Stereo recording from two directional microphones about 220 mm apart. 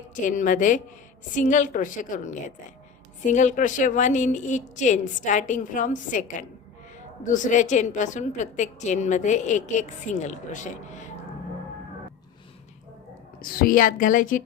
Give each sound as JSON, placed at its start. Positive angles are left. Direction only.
{"t": 0.1, "sound": "a woman's voice", "side_deg": 35}
{"t": 13.4, "sound": "a woman's voice", "side_deg": 40}